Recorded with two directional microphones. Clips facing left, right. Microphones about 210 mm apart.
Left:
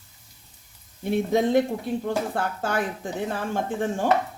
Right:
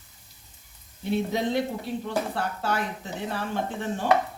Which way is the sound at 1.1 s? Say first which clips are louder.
Left 5 dB; 50° left (ahead or behind).